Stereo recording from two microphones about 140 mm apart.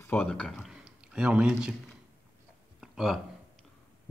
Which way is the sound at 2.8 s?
5° right (ahead or behind).